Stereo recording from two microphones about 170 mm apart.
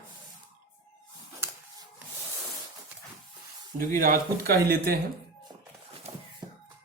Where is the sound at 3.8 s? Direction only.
55° right (ahead or behind).